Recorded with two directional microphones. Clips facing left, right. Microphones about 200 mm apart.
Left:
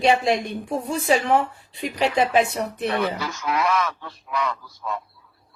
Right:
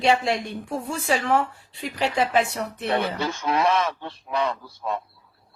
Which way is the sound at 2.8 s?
30° right (ahead or behind).